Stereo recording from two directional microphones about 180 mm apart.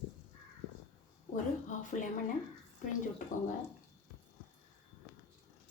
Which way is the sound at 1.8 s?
45° left (ahead or behind).